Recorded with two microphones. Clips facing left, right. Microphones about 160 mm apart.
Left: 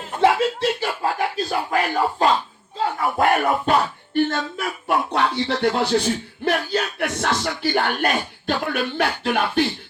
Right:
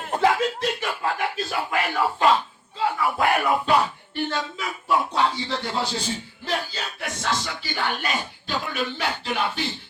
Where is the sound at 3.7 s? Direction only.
50° left (ahead or behind).